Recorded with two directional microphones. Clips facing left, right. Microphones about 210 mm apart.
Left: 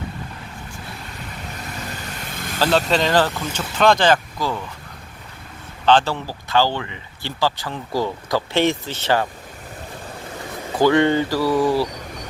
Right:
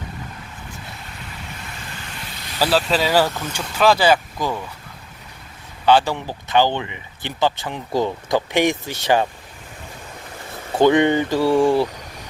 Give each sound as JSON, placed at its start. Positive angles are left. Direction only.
{"t": 2.3, "sound": "vehicle", "side_deg": 50}
{"t": 2.6, "sound": "speech", "side_deg": -5}
{"t": 5.8, "sound": "speech", "side_deg": -10}
{"t": 10.8, "sound": "speech", "side_deg": -20}